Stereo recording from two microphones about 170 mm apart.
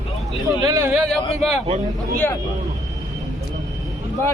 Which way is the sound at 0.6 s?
20° right (ahead or behind).